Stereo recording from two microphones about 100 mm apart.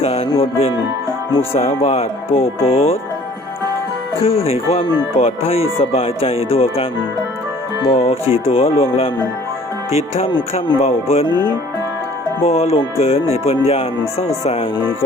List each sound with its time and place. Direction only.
0.0 s speech: 90° left
1.4 s speech: 90° left
4.2 s speech: 75° left (ahead or behind)
7.9 s speech: 85° left
10.8 s speech: 90° left
11.3 s speech: 45° left (ahead or behind)
12.4 s speech: 90° left